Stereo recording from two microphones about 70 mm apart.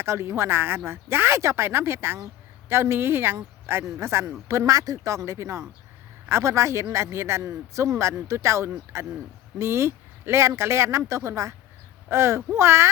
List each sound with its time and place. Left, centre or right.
0.0 s speech: right